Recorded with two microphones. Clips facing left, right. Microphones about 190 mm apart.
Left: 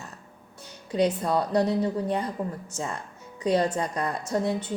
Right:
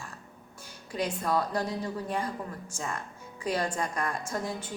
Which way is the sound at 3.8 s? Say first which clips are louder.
Left 3 dB; 35° left (ahead or behind).